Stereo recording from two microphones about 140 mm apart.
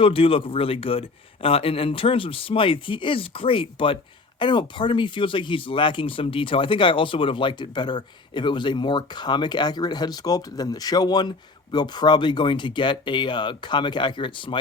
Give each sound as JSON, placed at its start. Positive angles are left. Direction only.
{"t": 0.0, "sound": "speech", "side_deg": 40}